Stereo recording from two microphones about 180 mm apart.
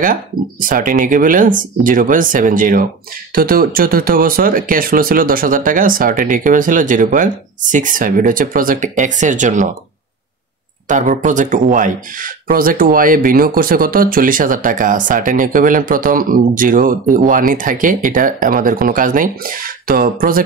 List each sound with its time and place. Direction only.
0.0 s speech: 50° right (ahead or behind)
10.9 s speech: 45° right (ahead or behind)